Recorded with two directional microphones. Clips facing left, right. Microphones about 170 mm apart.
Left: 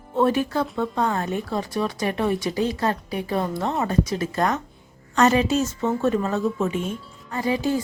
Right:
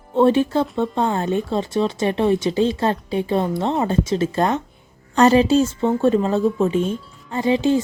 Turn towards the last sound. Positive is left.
turn(degrees=-25)  # may be behind; listen again after turning